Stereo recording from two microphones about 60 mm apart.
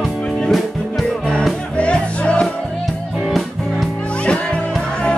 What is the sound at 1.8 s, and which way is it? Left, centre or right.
Music, centre.